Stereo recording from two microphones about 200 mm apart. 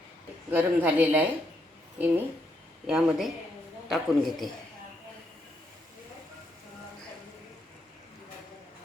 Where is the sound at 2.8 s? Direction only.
5° right (ahead or behind).